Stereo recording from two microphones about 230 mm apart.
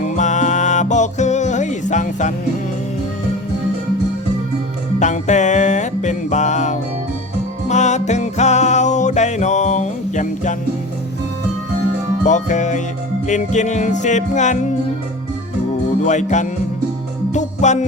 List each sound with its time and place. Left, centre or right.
0.0 s music: left
4.9 s music: left
12.2 s music: left
16.0 s music: left